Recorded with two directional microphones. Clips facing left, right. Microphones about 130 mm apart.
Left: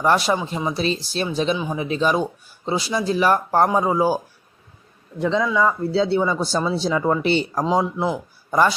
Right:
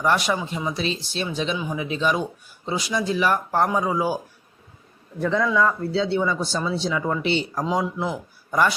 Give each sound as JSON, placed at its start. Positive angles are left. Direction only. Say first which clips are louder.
{"t": 0.0, "sound": "speech", "louder": "left 3 dB", "side_deg": 35}
{"t": 5.2, "sound": "a man's voice", "louder": "left 1 dB", "side_deg": 15}
{"t": 5.9, "sound": "speech", "louder": "left 3 dB", "side_deg": 35}
{"t": 7.6, "sound": "a man's voice", "louder": "left 4 dB", "side_deg": 30}